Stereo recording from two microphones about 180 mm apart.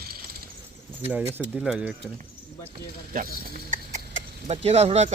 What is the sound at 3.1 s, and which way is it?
Speech, 50° right (ahead or behind).